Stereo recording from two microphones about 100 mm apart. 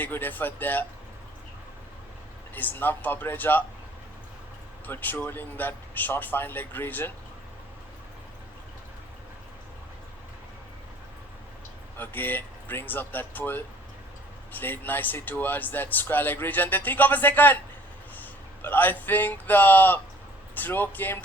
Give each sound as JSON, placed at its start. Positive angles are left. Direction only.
{"t": 0.0, "sound": "speech", "side_deg": 20}
{"t": 2.6, "sound": "speech", "side_deg": 20}
{"t": 4.9, "sound": "speech", "side_deg": 20}
{"t": 11.9, "sound": "a man's voice", "side_deg": 20}